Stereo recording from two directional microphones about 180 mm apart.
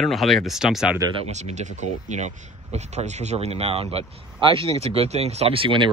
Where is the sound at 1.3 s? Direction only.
40° right (ahead or behind).